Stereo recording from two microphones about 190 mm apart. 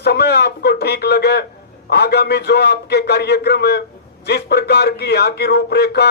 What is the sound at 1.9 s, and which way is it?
Speech, 60° left (ahead or behind).